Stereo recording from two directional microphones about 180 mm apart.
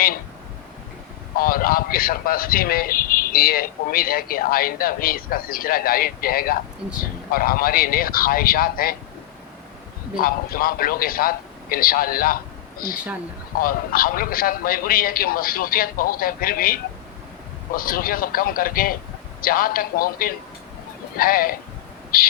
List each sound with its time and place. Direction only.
1.4 s a man's voice: 55° left (ahead or behind)
10.2 s a man's voice: 55° left (ahead or behind)